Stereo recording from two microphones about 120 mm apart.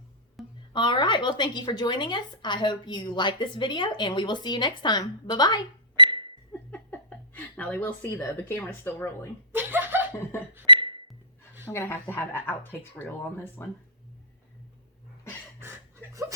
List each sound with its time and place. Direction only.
0.7 s a woman's voice: 40° left (ahead or behind)
6.0 s a sound: 45° right (ahead or behind)
6.7 s speech: 10° left (ahead or behind)
9.5 s chuckle: 15° right (ahead or behind)
10.7 s music: 45° right (ahead or behind)
11.6 s a woman's voice: 20° left (ahead or behind)